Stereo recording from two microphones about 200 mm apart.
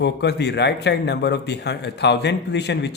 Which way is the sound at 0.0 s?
60° left (ahead or behind).